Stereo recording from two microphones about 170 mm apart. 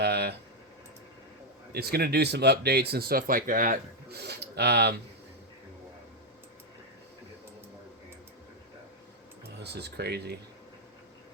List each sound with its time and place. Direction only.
0.0 s a sound: 75° right (ahead or behind)
1.7 s speech: 65° right (ahead or behind)
9.6 s speech: 75° right (ahead or behind)